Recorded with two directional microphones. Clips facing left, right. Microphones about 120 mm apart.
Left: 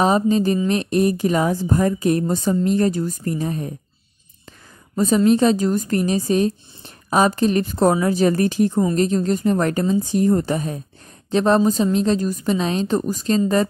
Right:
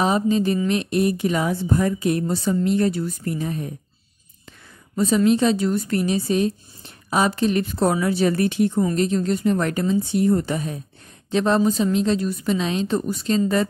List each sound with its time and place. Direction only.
0.0 s a woman's voice: 40° left (ahead or behind)
4.9 s a woman's voice: 40° left (ahead or behind)